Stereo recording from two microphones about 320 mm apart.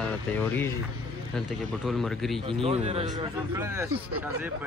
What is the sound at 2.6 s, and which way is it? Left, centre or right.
Speech, centre.